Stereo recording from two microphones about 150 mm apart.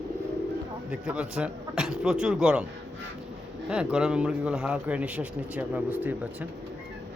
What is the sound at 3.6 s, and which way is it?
A man's voice, 5° right (ahead or behind).